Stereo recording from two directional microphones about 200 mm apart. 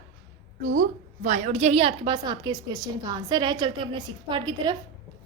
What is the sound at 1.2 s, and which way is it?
A woman's voice, 35° right (ahead or behind).